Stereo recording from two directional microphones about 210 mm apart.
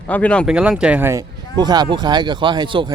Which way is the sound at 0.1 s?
5° left (ahead or behind).